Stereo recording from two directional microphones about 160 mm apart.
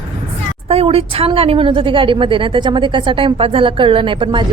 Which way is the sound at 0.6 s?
40° right (ahead or behind).